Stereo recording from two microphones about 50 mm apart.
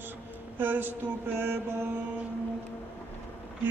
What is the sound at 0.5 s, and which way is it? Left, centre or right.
Mantra, right.